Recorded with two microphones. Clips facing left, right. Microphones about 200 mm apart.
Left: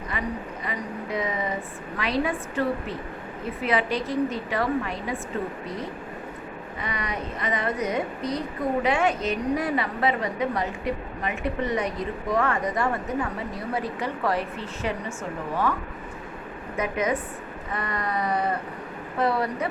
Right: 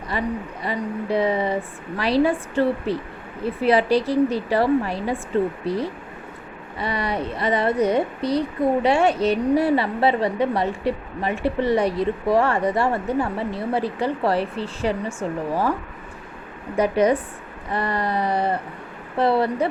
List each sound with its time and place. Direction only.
0.1 s speech: 35° right (ahead or behind)
16.7 s speech: 35° right (ahead or behind)